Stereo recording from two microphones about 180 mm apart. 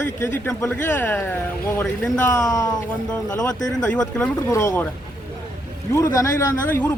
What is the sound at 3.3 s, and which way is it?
Speech, 20° left (ahead or behind).